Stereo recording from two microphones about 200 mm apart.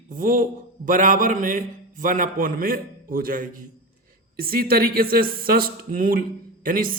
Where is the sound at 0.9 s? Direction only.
40° right (ahead or behind).